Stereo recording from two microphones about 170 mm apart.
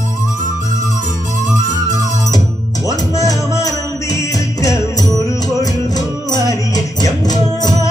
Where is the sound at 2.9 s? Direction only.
20° left (ahead or behind).